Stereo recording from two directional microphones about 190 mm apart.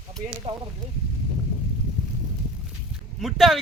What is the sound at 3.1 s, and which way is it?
Speech, centre (ahead or behind).